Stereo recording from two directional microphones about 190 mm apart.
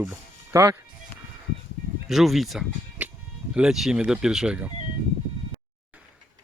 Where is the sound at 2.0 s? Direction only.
Centre (ahead or behind).